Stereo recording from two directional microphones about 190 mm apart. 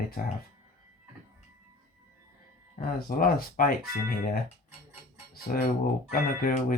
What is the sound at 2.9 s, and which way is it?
Speech, 50° left (ahead or behind).